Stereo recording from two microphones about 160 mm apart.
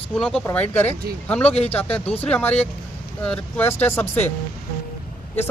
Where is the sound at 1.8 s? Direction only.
10° left (ahead or behind).